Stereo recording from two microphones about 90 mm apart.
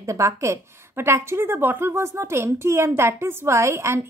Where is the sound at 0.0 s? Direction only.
35° right (ahead or behind).